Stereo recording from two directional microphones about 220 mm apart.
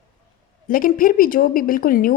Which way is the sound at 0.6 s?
40° left (ahead or behind).